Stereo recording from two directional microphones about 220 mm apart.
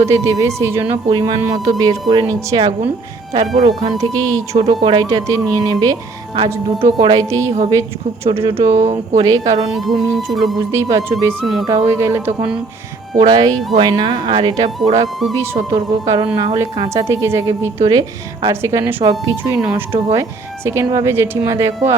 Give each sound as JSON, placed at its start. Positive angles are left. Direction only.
{"t": 0.0, "sound": "a woman's voice", "side_deg": -15}
{"t": 8.3, "sound": "speech", "side_deg": -25}
{"t": 9.7, "sound": "speech", "side_deg": 0}
{"t": 10.7, "sound": "a woman's voice", "side_deg": -15}
{"t": 15.7, "sound": "a woman's voice", "side_deg": -20}